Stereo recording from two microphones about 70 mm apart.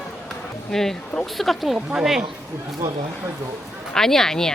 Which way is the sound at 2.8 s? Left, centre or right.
Right.